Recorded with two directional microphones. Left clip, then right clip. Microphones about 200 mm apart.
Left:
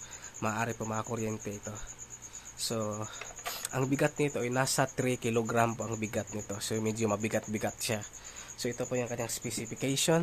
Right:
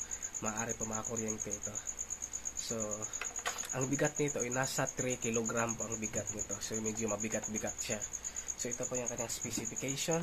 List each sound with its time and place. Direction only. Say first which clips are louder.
0.4 s speech: left 6 dB; 50° left (ahead or behind)
3.7 s speech: left 5 dB; 45° left (ahead or behind)